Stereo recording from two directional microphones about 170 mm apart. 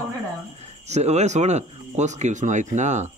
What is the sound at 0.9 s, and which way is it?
Speech, 40° right (ahead or behind).